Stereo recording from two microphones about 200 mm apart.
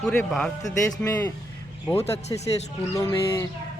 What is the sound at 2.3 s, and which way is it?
Speech, 20° left (ahead or behind).